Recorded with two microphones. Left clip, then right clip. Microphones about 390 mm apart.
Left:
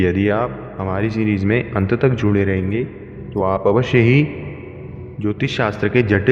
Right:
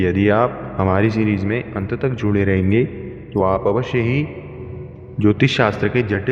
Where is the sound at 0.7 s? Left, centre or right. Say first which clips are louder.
Right 6 dB; right.